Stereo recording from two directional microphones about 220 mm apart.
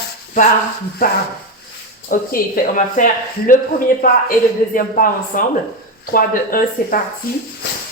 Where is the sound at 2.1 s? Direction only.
40° left (ahead or behind).